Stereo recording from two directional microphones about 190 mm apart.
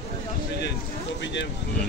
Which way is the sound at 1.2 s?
70° left (ahead or behind).